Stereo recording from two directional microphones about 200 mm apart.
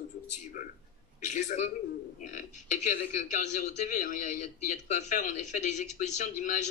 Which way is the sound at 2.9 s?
40° left (ahead or behind).